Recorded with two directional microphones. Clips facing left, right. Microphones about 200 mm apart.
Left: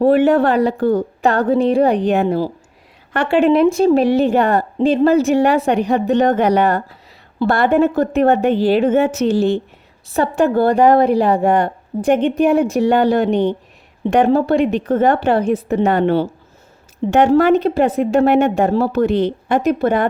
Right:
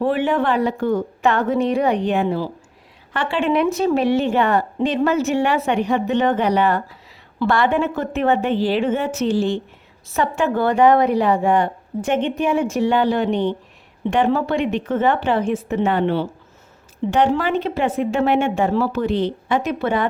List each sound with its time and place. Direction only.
0.0 s a woman's voice: 40° left (ahead or behind)